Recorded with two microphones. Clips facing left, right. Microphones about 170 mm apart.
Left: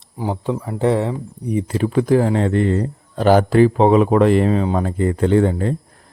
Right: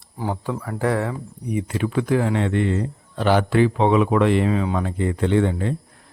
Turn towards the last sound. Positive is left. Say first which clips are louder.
# left 4 dB
turn(degrees=40)  # may be behind; listen again after turning